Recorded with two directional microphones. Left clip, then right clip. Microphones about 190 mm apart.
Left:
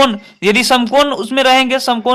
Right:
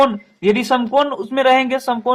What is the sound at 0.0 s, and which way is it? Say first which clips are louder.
A man's voice: left 2 dB; 40° left (ahead or behind).